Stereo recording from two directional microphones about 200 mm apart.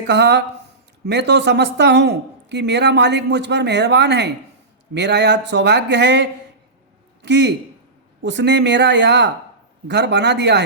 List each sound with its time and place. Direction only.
0.1 s a man's voice: 60° right (ahead or behind)